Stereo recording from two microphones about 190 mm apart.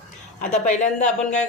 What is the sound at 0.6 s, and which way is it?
Speech, 40° left (ahead or behind).